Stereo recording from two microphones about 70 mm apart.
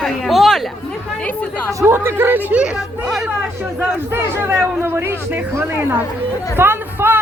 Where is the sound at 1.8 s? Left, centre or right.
Right.